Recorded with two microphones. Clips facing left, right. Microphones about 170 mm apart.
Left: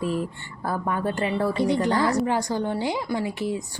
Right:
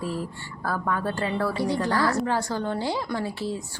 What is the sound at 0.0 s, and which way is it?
A woman's voice, 20° left (ahead or behind).